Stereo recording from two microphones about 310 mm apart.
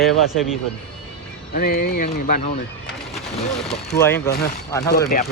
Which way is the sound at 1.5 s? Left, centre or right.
Left.